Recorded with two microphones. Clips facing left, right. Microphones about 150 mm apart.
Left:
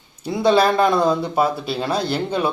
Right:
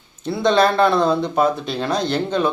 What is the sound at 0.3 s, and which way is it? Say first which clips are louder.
Speech: even; 10° left (ahead or behind).